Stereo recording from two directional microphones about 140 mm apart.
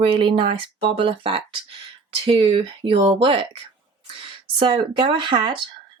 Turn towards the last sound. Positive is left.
turn(degrees=-35)  # may be behind; listen again after turning